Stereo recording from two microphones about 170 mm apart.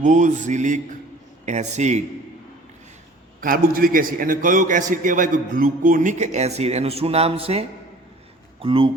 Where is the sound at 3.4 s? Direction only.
55° right (ahead or behind).